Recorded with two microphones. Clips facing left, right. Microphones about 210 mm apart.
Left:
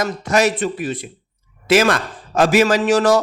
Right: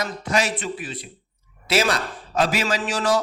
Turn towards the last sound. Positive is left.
turn(degrees=65)  # may be behind; listen again after turning